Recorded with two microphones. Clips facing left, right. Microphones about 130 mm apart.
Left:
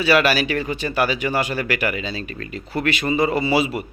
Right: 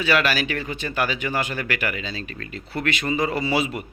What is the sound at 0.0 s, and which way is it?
Speech, 10° left (ahead or behind).